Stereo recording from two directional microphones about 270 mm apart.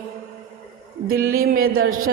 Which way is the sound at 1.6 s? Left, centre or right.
Right.